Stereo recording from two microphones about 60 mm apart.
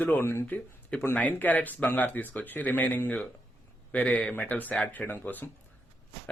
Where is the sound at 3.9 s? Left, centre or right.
Centre.